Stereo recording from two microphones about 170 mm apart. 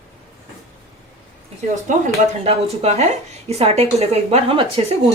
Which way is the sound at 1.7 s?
45° right (ahead or behind).